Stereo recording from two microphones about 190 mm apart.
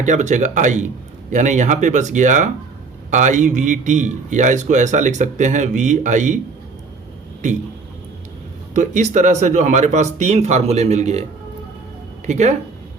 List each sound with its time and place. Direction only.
0.0 s a man's voice: 40° right (ahead or behind)
8.7 s a man's voice: 40° right (ahead or behind)